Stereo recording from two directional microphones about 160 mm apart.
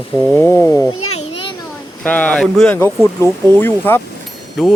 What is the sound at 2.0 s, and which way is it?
Speech, 10° left (ahead or behind).